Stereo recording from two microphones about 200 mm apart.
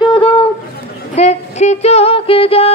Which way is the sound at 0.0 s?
25° left (ahead or behind).